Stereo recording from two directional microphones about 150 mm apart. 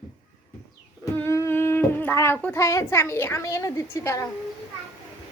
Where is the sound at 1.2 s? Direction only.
15° left (ahead or behind).